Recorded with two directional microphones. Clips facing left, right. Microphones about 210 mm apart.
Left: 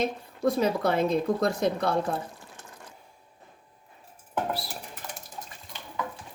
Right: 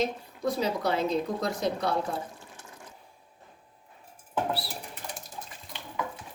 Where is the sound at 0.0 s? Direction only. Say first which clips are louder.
Left 3 dB; 55° left (ahead or behind).